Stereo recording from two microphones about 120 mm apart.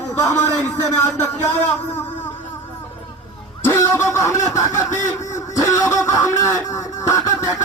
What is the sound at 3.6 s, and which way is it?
Speech, 25° left (ahead or behind).